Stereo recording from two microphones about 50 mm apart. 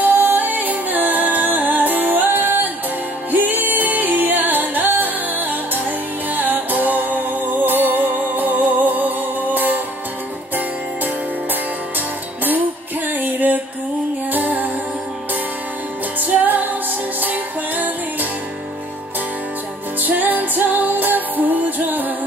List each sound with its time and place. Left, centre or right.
0.0 s music: right
13.1 s music: right
16.2 s music: right
20.0 s music: right